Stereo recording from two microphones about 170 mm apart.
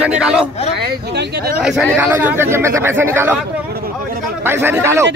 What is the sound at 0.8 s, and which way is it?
Speech, 70° right (ahead or behind).